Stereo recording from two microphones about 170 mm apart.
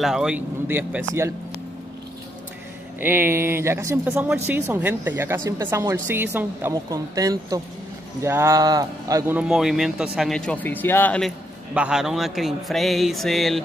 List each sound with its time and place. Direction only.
0.0 s a woman's voice: 5° right (ahead or behind)
3.0 s a woman's voice: 10° right (ahead or behind)
9.4 s speech: 5° right (ahead or behind)
11.7 s speech: 5° right (ahead or behind)